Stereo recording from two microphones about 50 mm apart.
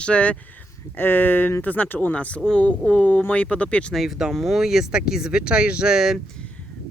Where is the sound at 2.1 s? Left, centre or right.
Left.